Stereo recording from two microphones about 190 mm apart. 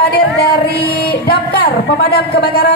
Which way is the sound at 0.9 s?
55° left (ahead or behind).